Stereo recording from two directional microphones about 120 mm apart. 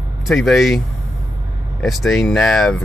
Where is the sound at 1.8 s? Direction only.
Centre (ahead or behind).